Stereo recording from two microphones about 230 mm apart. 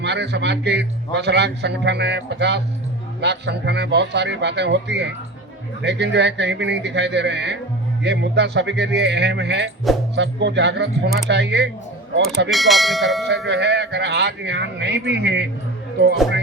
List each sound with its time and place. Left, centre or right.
0.0 s a man's voice: right
12.5 s speech: centre
13.5 s a man's voice: right